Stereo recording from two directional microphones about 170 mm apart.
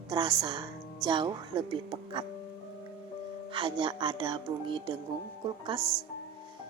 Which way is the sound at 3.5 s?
30° right (ahead or behind).